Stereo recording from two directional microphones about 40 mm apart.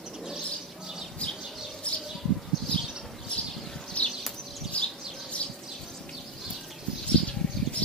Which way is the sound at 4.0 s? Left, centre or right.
Left.